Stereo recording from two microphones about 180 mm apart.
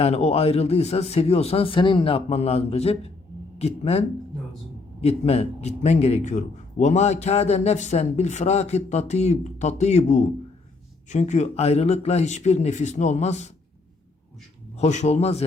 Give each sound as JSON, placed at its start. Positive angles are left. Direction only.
{"t": 0.0, "sound": "a man's voice", "side_deg": 35}
{"t": 14.8, "sound": "a man's voice", "side_deg": 40}